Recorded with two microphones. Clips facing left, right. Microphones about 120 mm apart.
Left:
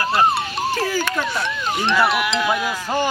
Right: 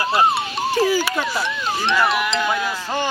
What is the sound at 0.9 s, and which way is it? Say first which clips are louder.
Speech: right 2 dB; 10° right (ahead or behind).